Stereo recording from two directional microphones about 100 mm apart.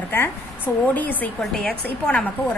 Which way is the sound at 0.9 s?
15° left (ahead or behind).